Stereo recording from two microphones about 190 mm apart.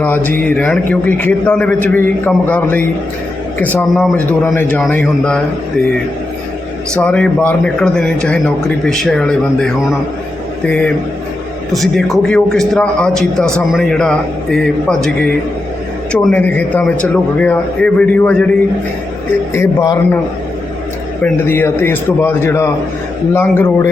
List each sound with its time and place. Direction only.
0.3 s a man's voice: 10° left (ahead or behind)
6.9 s a man's voice: 5° left (ahead or behind)
10.7 s a man's voice: 5° left (ahead or behind)
16.3 s a man's voice: 10° left (ahead or behind)
19.5 s a man's voice: 15° left (ahead or behind)
21.2 s a man's voice: 10° left (ahead or behind)